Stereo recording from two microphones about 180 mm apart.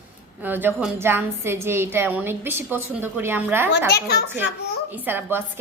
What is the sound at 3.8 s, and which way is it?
Speech, 60° left (ahead or behind).